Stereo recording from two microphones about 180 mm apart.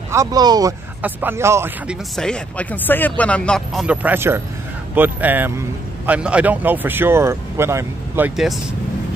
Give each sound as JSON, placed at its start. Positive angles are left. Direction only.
{"t": 0.1, "sound": "a man's voice", "side_deg": -20}
{"t": 2.1, "sound": "a man's voice", "side_deg": 5}